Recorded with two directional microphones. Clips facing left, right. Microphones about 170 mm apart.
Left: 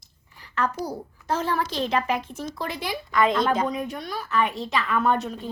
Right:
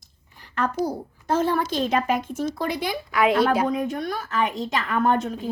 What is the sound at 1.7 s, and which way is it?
A woman's voice, 45° right (ahead or behind).